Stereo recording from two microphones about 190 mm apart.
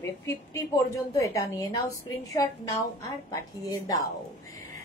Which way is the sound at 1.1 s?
15° left (ahead or behind).